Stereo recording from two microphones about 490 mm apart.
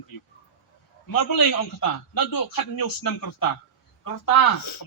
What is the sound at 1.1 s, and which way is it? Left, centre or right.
A man's voice, left.